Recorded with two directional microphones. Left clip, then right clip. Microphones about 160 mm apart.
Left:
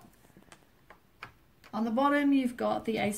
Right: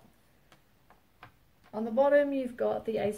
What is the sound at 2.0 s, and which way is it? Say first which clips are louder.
Speech: right 3 dB; 25° right (ahead or behind).